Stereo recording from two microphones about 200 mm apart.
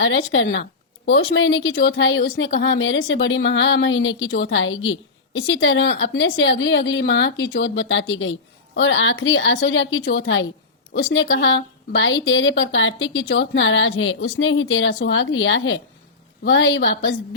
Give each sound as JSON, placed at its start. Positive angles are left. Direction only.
{"t": 0.0, "sound": "a woman's voice", "side_deg": 70}
{"t": 2.5, "sound": "a woman's voice", "side_deg": 55}
{"t": 14.9, "sound": "a woman's voice", "side_deg": 65}